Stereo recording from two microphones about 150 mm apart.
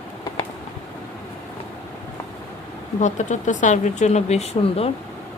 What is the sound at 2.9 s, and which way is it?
Speech, 55° left (ahead or behind).